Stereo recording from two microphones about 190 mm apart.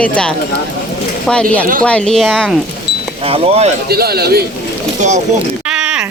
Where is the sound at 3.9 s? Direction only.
55° right (ahead or behind).